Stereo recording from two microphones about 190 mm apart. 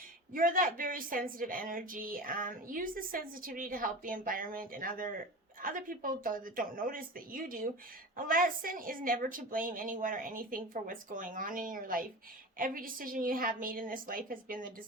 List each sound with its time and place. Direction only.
0.3 s a woman's voice: 45° right (ahead or behind)